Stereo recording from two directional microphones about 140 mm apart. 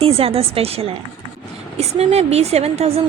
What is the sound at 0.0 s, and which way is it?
A woman's voice, 45° right (ahead or behind).